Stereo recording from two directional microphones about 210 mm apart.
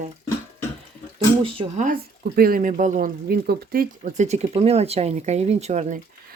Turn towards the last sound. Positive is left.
turn(degrees=-35)  # may be behind; listen again after turning